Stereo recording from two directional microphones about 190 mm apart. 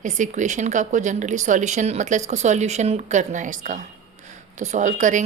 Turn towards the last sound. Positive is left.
turn(degrees=-40)  # may be behind; listen again after turning